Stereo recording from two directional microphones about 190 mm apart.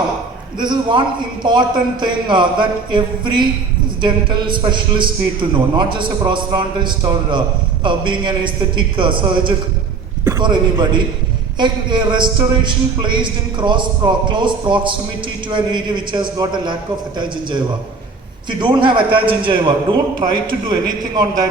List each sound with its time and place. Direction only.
0.6 s a man's voice: 25° right (ahead or behind)
18.4 s a man's voice: 25° right (ahead or behind)